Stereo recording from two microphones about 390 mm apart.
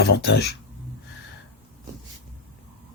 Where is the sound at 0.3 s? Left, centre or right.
Left.